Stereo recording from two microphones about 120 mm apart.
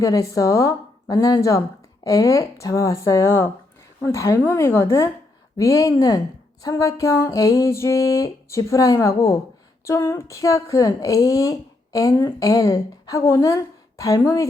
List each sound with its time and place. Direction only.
0.0 s a woman's voice: 30° left (ahead or behind)